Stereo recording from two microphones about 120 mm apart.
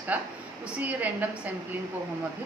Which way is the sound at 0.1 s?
15° right (ahead or behind).